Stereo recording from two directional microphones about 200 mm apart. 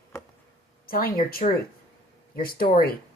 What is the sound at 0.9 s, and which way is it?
Speech, 45° left (ahead or behind).